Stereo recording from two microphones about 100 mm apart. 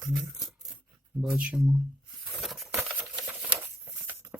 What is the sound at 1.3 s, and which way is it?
Speech, 15° right (ahead or behind).